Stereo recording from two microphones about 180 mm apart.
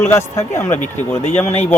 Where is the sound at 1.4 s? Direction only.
35° left (ahead or behind).